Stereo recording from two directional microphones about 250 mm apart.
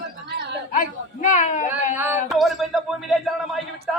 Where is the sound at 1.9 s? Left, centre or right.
Centre.